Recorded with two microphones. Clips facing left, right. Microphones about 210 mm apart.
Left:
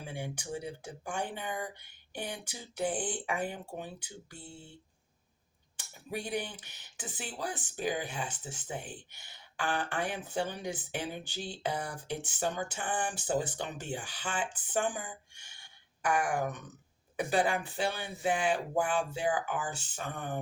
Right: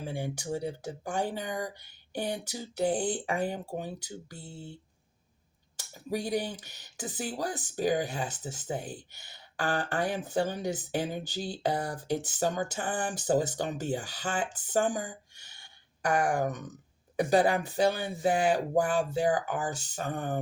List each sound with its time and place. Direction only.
0.0 s speech: 40° right (ahead or behind)
5.7 s speech: 40° right (ahead or behind)